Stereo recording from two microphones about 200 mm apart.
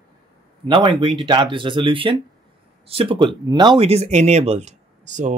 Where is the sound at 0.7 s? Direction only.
25° right (ahead or behind).